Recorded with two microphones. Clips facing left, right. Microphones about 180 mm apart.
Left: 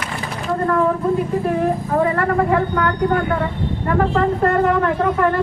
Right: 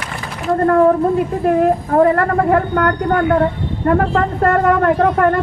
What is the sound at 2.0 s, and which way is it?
Speech, 50° right (ahead or behind).